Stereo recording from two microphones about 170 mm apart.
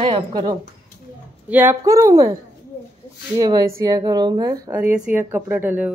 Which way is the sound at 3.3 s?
25° right (ahead or behind).